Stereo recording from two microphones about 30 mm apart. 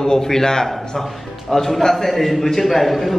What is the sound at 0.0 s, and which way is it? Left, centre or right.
A man's voice, left.